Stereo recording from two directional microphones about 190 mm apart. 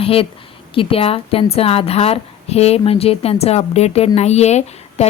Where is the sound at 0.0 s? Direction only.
30° left (ahead or behind).